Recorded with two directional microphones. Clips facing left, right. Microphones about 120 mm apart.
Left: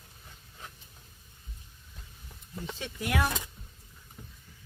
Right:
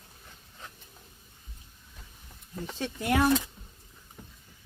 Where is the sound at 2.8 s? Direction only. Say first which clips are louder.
Right 5 dB; 30° right (ahead or behind).